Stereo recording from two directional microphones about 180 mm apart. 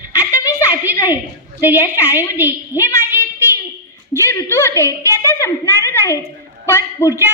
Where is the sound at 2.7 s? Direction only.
15° left (ahead or behind).